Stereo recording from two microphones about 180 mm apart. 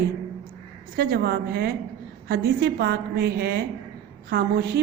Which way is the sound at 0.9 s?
60° right (ahead or behind).